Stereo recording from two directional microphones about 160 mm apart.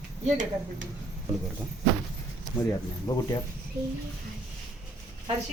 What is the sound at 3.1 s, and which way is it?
Speech, 20° left (ahead or behind).